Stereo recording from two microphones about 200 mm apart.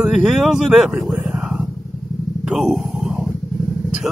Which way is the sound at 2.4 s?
Centre (ahead or behind).